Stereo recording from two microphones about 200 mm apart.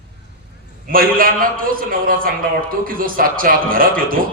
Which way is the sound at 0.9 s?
45° right (ahead or behind).